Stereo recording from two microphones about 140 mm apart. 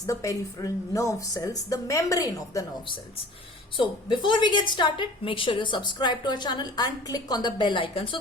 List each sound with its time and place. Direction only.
0.1 s speech: 25° left (ahead or behind)
3.8 s a woman's voice: 35° left (ahead or behind)